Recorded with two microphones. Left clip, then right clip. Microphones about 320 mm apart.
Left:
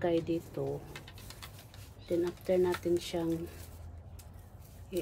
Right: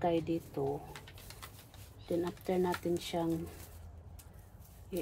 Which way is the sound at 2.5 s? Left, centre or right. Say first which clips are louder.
Left 4 dB; centre.